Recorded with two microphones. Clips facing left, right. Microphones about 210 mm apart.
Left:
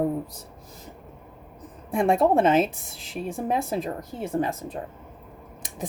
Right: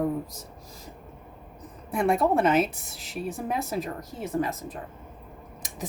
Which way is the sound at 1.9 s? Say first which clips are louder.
Left 3 dB; 30° left (ahead or behind).